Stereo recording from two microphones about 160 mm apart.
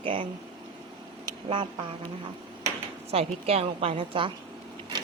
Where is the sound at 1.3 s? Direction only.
30° right (ahead or behind).